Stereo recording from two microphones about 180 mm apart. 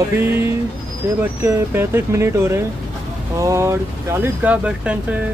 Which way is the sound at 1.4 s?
15° right (ahead or behind).